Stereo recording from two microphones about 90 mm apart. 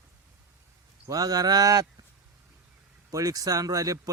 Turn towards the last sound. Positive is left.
turn(degrees=-40)  # may be behind; listen again after turning